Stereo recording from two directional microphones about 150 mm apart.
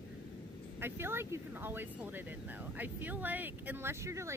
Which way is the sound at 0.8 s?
15° right (ahead or behind).